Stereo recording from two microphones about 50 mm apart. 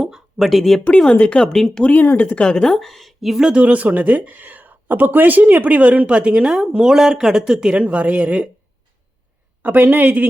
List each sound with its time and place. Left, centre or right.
0.0 s a sound: centre
0.4 s a woman's voice: centre
0.9 s speech: centre
1.5 s speech: centre
1.8 s speech: left
2.4 s a woman's voice: centre
3.5 s speech: right
9.6 s a woman's voice: right